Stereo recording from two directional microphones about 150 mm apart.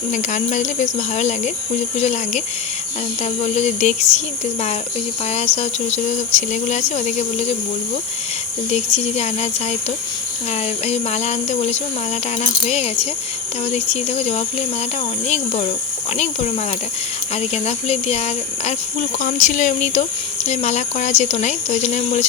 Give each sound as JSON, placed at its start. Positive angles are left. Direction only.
{"t": 0.1, "sound": "speech", "side_deg": 55}
{"t": 3.4, "sound": "speech", "side_deg": 50}
{"t": 5.3, "sound": "speech", "side_deg": 50}
{"t": 8.7, "sound": "speech", "side_deg": 45}
{"t": 10.8, "sound": "speech", "side_deg": 45}